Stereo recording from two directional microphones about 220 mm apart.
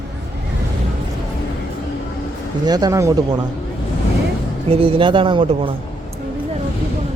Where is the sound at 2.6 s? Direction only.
15° right (ahead or behind).